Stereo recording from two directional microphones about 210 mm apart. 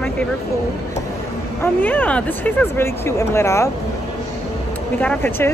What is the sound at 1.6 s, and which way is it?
A woman's voice, 5° left (ahead or behind).